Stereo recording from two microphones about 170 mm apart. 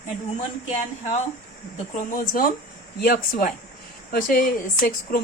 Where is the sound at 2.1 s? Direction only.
55° left (ahead or behind).